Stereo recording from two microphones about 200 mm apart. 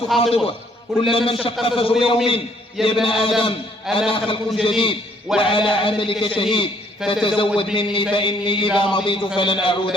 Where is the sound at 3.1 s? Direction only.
25° left (ahead or behind).